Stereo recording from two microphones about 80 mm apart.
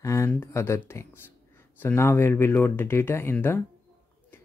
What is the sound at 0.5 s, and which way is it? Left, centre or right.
Speech, left.